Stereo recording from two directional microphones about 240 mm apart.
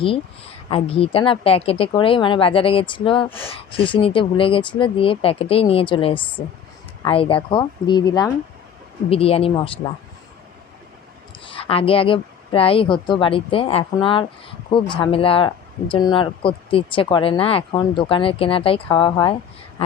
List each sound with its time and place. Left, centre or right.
0.0 s a woman's voice: left
11.4 s a woman's voice: left